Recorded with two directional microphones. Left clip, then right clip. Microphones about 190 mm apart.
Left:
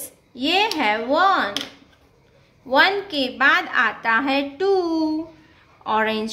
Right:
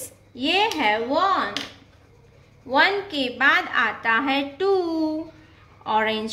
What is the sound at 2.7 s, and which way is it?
A woman's voice, 15° left (ahead or behind).